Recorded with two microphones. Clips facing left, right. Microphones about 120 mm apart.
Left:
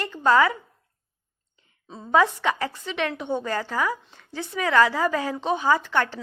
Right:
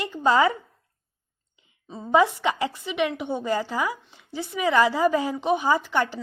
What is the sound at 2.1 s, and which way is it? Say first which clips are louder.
A woman's voice: right 1 dB; 15° right (ahead or behind).